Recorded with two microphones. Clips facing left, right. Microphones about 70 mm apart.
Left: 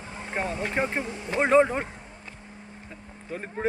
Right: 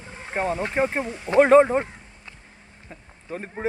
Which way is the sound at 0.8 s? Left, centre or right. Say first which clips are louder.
Right 4 dB; centre.